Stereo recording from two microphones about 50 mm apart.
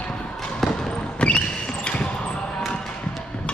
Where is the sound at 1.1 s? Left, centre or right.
Left.